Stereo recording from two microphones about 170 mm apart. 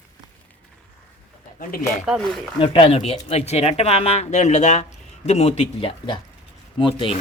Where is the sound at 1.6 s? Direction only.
55° left (ahead or behind).